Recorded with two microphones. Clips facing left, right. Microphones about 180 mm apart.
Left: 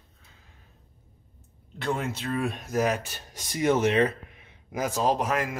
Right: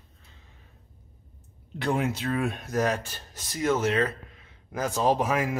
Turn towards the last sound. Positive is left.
turn(degrees=-5)  # may be behind; listen again after turning